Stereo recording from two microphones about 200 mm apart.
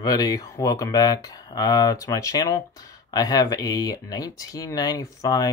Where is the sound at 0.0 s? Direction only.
20° left (ahead or behind).